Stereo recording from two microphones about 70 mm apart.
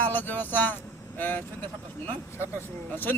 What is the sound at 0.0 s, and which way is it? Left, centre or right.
Speech, left.